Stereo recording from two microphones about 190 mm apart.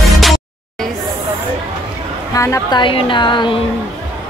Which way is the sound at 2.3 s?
15° left (ahead or behind).